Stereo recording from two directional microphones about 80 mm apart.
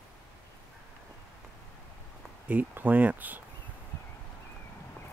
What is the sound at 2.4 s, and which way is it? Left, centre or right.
Speech, right.